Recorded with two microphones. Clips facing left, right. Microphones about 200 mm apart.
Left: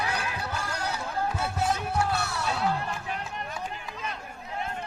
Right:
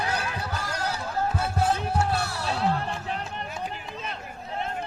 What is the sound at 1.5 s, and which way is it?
Music, 30° right (ahead or behind).